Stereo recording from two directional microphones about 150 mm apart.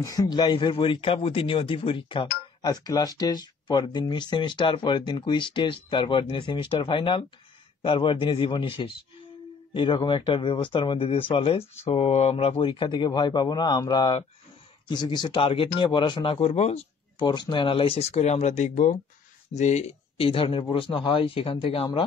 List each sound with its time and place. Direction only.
0.0 s speech: 25° left (ahead or behind)
11.6 s speech: 15° left (ahead or behind)
11.9 s speech: 45° left (ahead or behind)
17.2 s speech: 30° left (ahead or behind)